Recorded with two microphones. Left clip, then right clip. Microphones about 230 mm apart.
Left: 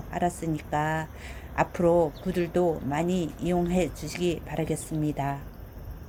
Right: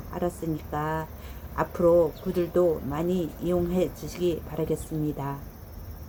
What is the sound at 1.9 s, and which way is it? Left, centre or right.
Speech, centre.